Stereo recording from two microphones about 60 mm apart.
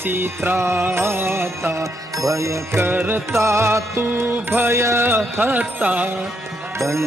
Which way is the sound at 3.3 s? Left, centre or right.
Right.